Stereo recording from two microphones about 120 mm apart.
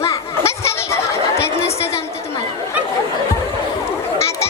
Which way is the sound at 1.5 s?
60° left (ahead or behind).